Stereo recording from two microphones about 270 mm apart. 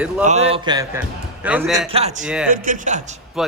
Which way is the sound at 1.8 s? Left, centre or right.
Right.